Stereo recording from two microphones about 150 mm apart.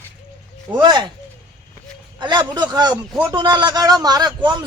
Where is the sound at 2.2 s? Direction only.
30° right (ahead or behind).